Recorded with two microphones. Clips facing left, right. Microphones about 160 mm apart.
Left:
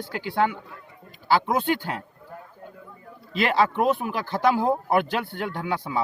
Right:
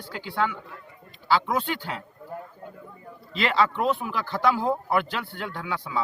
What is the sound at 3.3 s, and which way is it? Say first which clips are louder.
Speech: left 2 dB; 50° left (ahead or behind).